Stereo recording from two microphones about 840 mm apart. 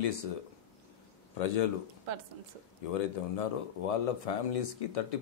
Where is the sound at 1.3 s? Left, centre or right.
Left.